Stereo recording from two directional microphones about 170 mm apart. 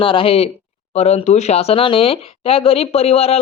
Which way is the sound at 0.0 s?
30° left (ahead or behind).